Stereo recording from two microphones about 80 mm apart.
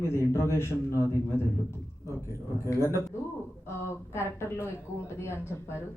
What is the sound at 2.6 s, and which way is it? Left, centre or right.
Speech, left.